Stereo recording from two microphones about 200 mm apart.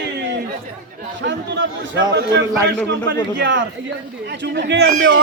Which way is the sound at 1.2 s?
60° right (ahead or behind).